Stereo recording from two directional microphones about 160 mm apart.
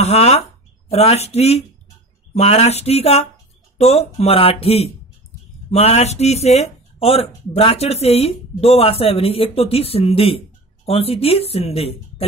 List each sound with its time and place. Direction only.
0.0 s speech: 40° left (ahead or behind)